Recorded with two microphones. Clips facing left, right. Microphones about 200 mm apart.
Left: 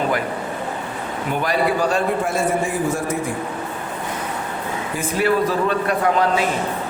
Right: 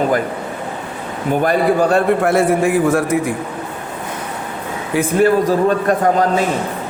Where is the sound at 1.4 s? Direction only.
50° right (ahead or behind).